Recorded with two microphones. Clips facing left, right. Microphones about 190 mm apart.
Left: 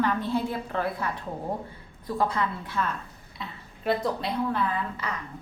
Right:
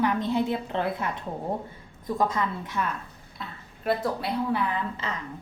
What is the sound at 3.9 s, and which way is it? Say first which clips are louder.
Speech: even; 5° right (ahead or behind).